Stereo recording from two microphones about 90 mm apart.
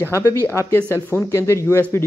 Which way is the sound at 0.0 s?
30° left (ahead or behind).